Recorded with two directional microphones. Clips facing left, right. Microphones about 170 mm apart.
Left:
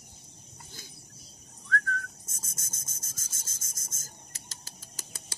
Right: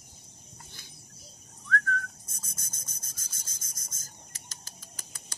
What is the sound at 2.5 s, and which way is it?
Rub, 45° left (ahead or behind).